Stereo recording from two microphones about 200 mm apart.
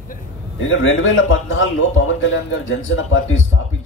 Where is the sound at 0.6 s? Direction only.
80° left.